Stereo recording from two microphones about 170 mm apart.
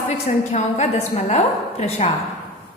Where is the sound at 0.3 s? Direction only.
45° left (ahead or behind).